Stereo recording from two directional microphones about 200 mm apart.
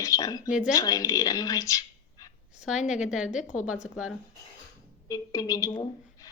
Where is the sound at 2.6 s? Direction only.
5° right (ahead or behind).